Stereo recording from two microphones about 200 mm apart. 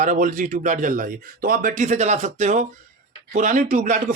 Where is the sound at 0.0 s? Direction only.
40° right (ahead or behind).